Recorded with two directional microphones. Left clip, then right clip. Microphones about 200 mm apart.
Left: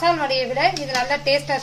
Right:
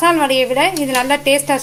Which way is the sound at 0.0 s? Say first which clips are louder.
Right 6 dB; 45° right (ahead or behind).